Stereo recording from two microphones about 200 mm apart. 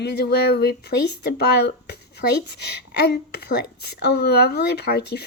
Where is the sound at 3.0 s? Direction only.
55° left (ahead or behind).